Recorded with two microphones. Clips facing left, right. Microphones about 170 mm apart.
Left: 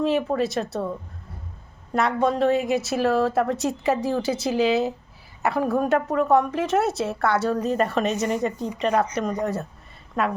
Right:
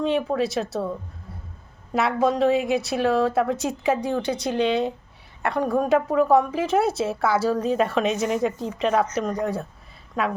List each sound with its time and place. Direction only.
0.0 s a woman's voice: centre (ahead or behind)
1.9 s a woman's voice: 5° right (ahead or behind)
8.9 s a woman's voice: 10° left (ahead or behind)